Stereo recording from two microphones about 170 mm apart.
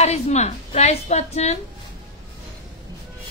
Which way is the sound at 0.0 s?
40° left (ahead or behind).